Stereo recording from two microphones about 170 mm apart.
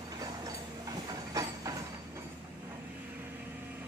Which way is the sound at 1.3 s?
20° right (ahead or behind).